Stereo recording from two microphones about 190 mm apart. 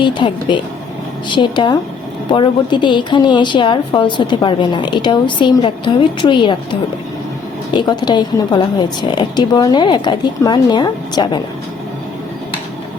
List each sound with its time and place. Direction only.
0.0 s a woman's voice: 25° left (ahead or behind)